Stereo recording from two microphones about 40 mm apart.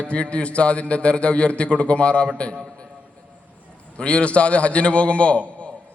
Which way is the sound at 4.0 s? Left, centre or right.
Left.